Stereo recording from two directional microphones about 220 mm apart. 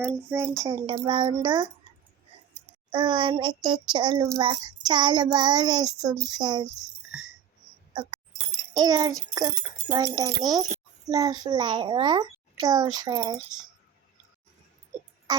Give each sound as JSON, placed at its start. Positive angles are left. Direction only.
{"t": 0.0, "sound": "a child's voice", "side_deg": -10}
{"t": 2.9, "sound": "a child's voice", "side_deg": -20}
{"t": 7.1, "sound": "a sound", "side_deg": -5}
{"t": 7.9, "sound": "a child's voice", "side_deg": -20}
{"t": 15.3, "sound": "music", "side_deg": -20}